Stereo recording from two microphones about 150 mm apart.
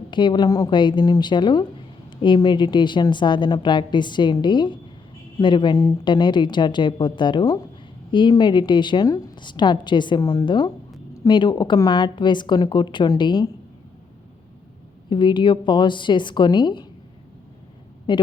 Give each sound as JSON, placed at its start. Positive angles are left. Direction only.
{"t": 0.1, "sound": "a woman's voice", "side_deg": 30}
{"t": 15.1, "sound": "a woman's voice", "side_deg": 30}
{"t": 18.1, "sound": "a woman's voice", "side_deg": 30}